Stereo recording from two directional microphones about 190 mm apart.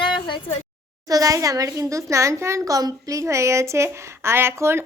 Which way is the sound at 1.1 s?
20° right (ahead or behind).